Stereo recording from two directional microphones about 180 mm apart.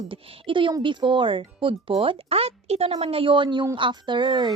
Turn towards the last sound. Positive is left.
turn(degrees=-25)  # may be behind; listen again after turning